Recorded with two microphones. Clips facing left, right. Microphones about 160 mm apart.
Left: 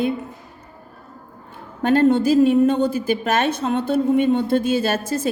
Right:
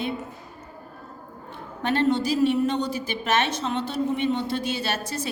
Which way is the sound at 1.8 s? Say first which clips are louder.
Left 7 dB; 45° left (ahead or behind).